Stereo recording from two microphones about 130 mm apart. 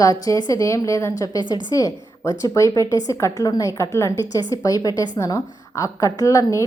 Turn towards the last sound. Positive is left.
turn(degrees=25)  # may be behind; listen again after turning